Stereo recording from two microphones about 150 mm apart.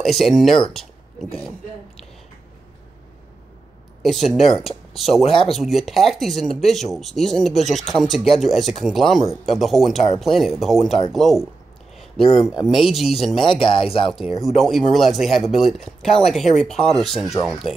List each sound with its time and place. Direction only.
0.0 s speech: centre (ahead or behind)
4.0 s speech: centre (ahead or behind)
5.2 s speech: 35° left (ahead or behind)
5.5 s speech: centre (ahead or behind)
13.5 s speech: 35° left (ahead or behind)
14.0 s speech: centre (ahead or behind)